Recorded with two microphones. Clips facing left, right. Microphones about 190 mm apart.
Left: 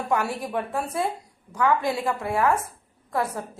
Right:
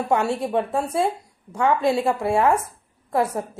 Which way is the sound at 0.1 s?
25° right (ahead or behind).